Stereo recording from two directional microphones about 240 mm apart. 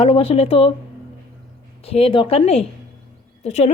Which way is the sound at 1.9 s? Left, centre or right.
Left.